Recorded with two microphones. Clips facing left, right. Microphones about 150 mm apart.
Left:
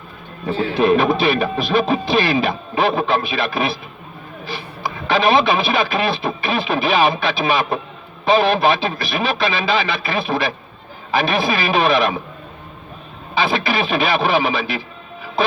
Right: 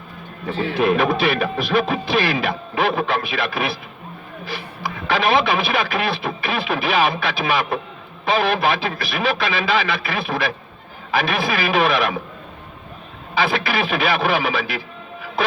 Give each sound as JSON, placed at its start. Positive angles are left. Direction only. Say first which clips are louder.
{"t": 0.8, "sound": "speech", "louder": "left 3 dB", "side_deg": 25}
{"t": 13.3, "sound": "speech", "louder": "left 2 dB", "side_deg": 25}